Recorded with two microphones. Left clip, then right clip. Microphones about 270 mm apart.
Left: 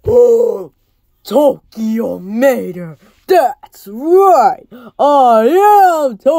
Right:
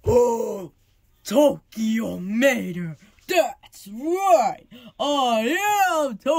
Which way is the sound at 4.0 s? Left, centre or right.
Left.